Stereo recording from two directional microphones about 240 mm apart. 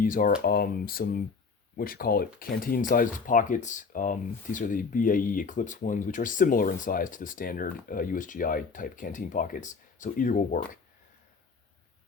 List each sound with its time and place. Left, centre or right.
0.0 s speech: left